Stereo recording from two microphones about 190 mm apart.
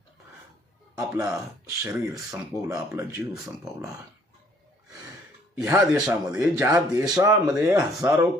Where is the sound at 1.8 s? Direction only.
15° right (ahead or behind).